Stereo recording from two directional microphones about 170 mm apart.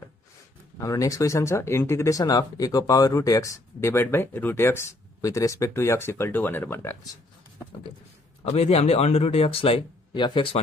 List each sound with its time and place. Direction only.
0.7 s speech: 20° left (ahead or behind)
8.5 s speech: 35° left (ahead or behind)